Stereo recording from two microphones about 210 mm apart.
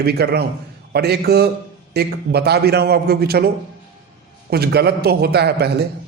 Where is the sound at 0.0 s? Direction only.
50° right (ahead or behind).